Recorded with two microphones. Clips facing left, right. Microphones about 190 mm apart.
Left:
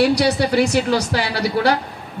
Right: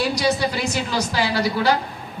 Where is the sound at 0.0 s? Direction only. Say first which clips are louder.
Left 5 dB; 70° left (ahead or behind).